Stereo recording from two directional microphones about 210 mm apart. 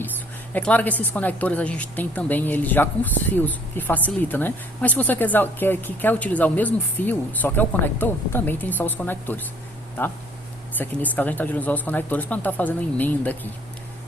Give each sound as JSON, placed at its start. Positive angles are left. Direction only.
{"t": 0.5, "sound": "a woman's voice", "side_deg": 5}
{"t": 10.8, "sound": "a woman's voice", "side_deg": 10}